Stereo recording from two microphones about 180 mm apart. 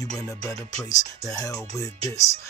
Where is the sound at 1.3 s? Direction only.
20° left (ahead or behind).